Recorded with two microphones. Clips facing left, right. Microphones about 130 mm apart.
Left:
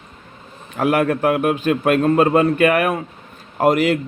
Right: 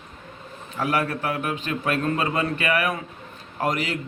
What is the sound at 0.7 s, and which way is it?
Speech, 50° left (ahead or behind).